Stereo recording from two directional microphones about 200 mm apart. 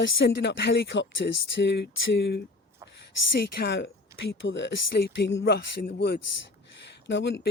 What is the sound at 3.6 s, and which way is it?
Speech, 60° left (ahead or behind).